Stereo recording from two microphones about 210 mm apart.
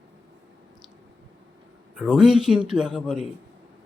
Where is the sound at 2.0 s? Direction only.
Centre (ahead or behind).